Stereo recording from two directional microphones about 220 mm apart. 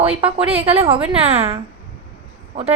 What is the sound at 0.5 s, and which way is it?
A woman's voice, 25° right (ahead or behind).